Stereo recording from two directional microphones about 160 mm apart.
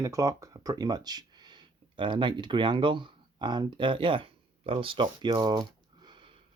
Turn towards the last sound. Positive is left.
turn(degrees=-30)  # may be behind; listen again after turning